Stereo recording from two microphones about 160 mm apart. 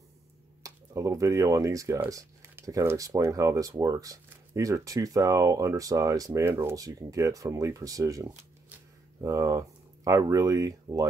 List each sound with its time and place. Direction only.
0.6 s speech: 20° right (ahead or behind)